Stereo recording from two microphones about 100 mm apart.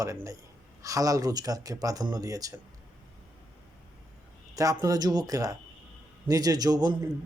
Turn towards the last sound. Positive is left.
turn(degrees=-40)  # may be behind; listen again after turning